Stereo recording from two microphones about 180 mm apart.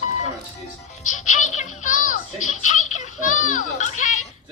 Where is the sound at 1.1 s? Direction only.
45° left (ahead or behind).